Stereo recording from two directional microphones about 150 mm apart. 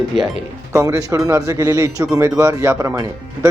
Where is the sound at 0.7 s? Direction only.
20° right (ahead or behind).